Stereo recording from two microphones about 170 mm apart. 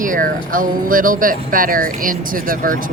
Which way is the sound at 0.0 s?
55° right (ahead or behind).